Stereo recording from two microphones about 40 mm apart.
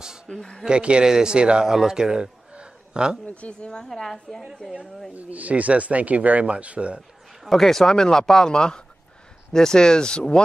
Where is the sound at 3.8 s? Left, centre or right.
Centre.